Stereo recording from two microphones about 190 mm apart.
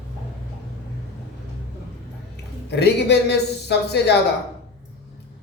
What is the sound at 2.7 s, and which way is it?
A woman's voice, 60° left (ahead or behind).